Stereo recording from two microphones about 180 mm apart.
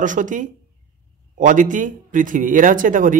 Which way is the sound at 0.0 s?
45° right (ahead or behind).